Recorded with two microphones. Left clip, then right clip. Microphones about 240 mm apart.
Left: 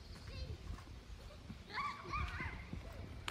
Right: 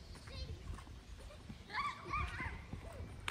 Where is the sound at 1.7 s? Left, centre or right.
Right.